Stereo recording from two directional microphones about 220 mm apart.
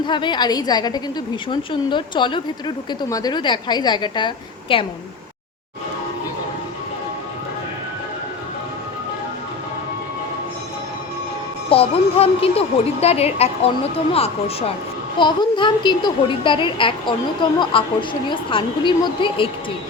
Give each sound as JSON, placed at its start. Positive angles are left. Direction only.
{"t": 0.0, "sound": "a woman's voice", "side_deg": 20}
{"t": 11.7, "sound": "a woman's voice", "side_deg": 25}